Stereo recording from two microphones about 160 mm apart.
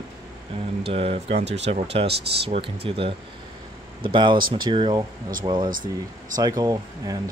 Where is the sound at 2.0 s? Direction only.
40° right (ahead or behind).